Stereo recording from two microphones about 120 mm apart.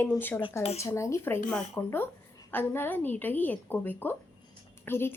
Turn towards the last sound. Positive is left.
turn(degrees=20)  # may be behind; listen again after turning